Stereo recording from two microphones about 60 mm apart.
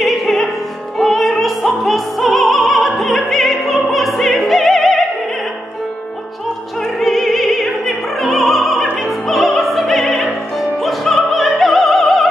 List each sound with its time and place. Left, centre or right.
0.0 s music: centre
0.9 s opera: centre
6.8 s opera: centre